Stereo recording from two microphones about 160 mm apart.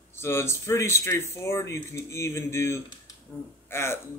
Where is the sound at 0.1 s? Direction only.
15° left (ahead or behind).